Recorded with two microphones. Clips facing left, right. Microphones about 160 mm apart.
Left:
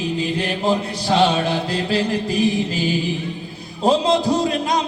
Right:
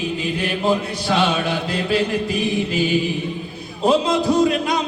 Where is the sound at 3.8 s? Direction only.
35° left (ahead or behind).